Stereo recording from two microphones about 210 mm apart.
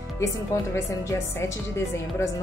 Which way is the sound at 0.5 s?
15° left (ahead or behind).